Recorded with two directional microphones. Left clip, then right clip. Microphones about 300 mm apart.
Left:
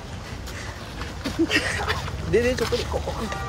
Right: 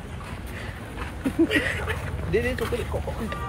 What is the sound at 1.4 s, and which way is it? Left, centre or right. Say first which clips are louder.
Speech: left 4 dB; centre.